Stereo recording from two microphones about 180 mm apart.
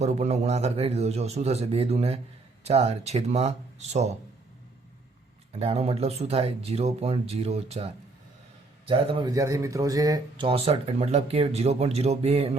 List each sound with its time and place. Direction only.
0.0 s speech: 35° right (ahead or behind)
5.5 s speech: 35° right (ahead or behind)